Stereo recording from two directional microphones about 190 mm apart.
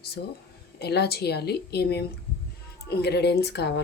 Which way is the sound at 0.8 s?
60° left (ahead or behind).